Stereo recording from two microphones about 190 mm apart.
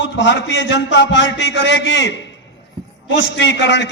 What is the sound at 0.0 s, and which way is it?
A man's voice, 75° left (ahead or behind).